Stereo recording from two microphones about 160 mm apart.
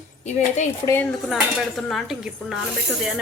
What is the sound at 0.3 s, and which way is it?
Speech, 50° left (ahead or behind).